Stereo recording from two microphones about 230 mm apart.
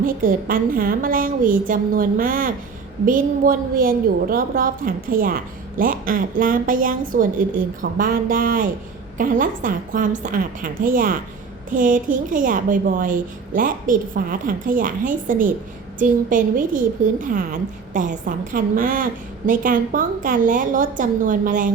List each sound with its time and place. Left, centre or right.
0.0 s a woman's voice: right